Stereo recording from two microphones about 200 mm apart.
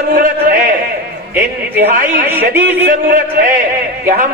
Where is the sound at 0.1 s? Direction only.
45° right (ahead or behind).